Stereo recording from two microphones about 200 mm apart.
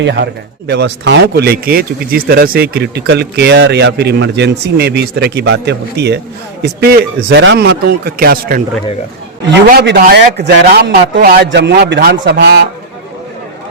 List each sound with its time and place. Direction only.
0.0 s a man's voice: 60° right (ahead or behind)
9.6 s a man's voice: 50° right (ahead or behind)